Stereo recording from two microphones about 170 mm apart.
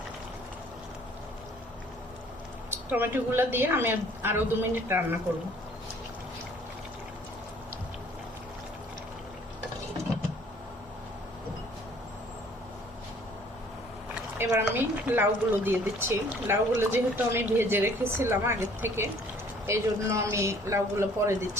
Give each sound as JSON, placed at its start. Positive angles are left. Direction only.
{"t": 2.6, "sound": "speech", "side_deg": -15}
{"t": 14.3, "sound": "speech", "side_deg": -10}